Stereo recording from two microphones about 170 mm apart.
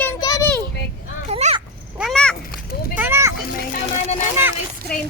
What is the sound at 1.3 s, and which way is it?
Speech, 40° right (ahead or behind).